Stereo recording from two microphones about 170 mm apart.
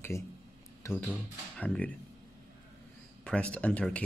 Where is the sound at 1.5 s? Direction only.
10° left (ahead or behind).